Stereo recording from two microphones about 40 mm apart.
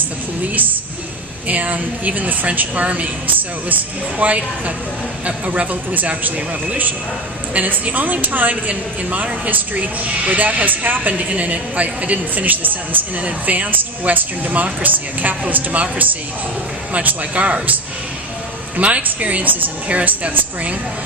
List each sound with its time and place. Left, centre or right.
1.5 s a woman's voice: right
5.9 s a woman's voice: right
13.2 s a woman's voice: right
18.8 s a woman's voice: right
19.9 s a woman's voice: right